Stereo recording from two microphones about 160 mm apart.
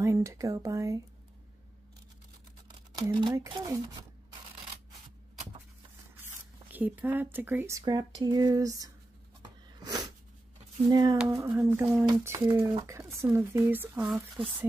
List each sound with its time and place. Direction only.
0.0 s speech: 20° right (ahead or behind)
2.9 s speech: 25° right (ahead or behind)
6.2 s speech: 15° right (ahead or behind)
7.8 s speech: 25° right (ahead or behind)
9.8 s sneeze: 25° right (ahead or behind)
10.9 s speech: 25° right (ahead or behind); by 14.4 s 5° right (ahead or behind)